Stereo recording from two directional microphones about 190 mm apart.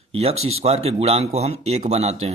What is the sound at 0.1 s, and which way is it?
Speech, 30° right (ahead or behind).